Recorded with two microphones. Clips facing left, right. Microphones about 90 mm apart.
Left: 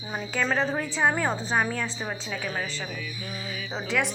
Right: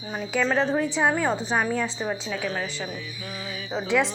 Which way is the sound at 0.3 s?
5° left (ahead or behind).